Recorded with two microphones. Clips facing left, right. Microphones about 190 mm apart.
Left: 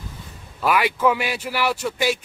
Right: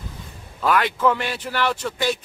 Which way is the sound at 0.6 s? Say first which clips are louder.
Even; 10° left (ahead or behind).